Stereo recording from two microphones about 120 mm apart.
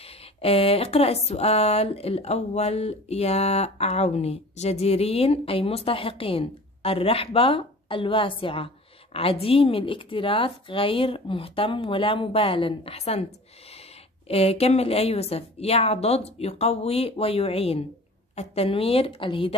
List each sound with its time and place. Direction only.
0.0 s speech: 55° left (ahead or behind)
14.2 s speech: 55° left (ahead or behind)